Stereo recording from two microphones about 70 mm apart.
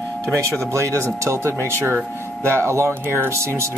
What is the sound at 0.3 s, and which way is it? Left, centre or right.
Speech, right.